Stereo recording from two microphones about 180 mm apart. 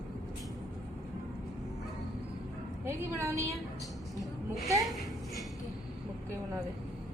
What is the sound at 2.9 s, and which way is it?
Speech, 15° right (ahead or behind).